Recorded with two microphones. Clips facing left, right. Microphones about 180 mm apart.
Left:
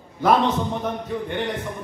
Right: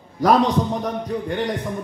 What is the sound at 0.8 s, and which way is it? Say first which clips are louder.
Speech: right 2 dB; 40° right (ahead or behind).